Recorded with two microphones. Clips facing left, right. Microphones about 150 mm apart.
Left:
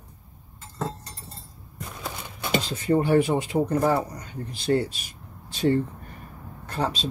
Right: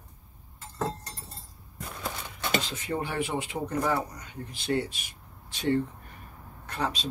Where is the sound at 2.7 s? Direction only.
40° left (ahead or behind).